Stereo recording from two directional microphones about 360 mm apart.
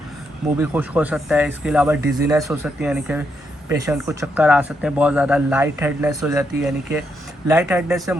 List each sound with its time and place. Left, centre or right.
0.6 s speech: centre